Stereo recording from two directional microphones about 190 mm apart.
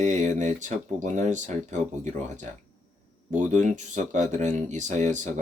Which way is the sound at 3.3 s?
40° right (ahead or behind).